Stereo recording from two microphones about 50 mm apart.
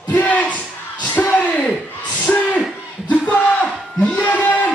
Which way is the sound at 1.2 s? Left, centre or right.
Left.